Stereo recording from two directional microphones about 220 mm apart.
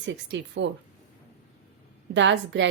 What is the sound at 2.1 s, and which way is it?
Speech, 55° right (ahead or behind).